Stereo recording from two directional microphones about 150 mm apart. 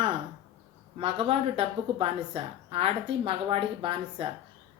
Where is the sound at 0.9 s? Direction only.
40° right (ahead or behind).